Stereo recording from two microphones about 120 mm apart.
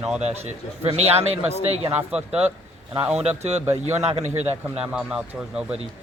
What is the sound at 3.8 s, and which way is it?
Speech, 65° right (ahead or behind).